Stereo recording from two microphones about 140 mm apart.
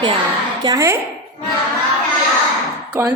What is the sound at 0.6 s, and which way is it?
Speech, 25° right (ahead or behind).